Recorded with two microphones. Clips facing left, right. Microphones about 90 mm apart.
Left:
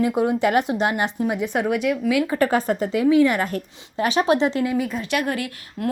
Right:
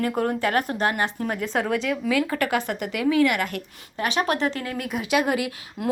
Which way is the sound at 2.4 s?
35° left (ahead or behind).